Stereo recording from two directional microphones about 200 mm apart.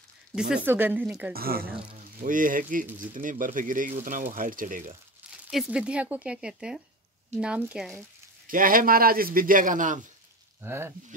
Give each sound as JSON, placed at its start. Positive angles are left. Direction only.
{"t": 0.7, "sound": "speech", "side_deg": -10}
{"t": 1.3, "sound": "speech", "side_deg": -50}
{"t": 5.5, "sound": "speech", "side_deg": -5}
{"t": 8.5, "sound": "speech", "side_deg": -45}
{"t": 10.6, "sound": "speech", "side_deg": -10}